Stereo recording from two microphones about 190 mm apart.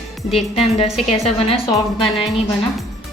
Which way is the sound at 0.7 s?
30° left (ahead or behind).